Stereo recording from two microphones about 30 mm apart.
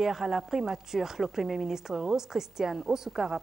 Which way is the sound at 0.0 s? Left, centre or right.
Centre.